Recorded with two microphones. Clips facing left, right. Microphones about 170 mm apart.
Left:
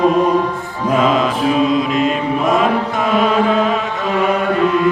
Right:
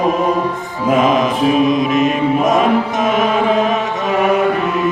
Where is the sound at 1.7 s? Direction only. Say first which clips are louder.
Right 2 dB; 20° right (ahead or behind).